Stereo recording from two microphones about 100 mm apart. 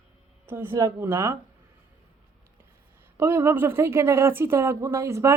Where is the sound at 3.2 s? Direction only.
25° right (ahead or behind).